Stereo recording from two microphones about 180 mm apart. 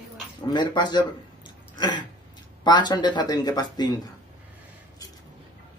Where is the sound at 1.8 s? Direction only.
25° left (ahead or behind).